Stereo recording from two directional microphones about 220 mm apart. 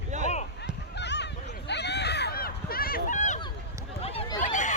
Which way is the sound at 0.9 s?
50° left (ahead or behind).